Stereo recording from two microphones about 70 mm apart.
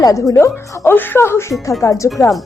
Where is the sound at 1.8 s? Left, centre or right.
Left.